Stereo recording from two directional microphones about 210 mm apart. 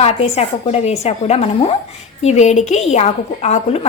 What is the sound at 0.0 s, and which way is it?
A woman's voice, 30° left (ahead or behind).